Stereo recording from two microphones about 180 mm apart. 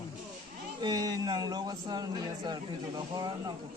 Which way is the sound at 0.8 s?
20° right (ahead or behind).